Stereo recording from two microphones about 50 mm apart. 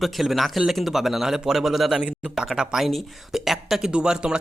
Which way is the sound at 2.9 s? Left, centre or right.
Centre.